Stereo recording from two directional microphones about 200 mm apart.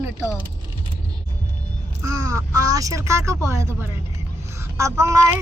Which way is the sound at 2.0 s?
15° right (ahead or behind).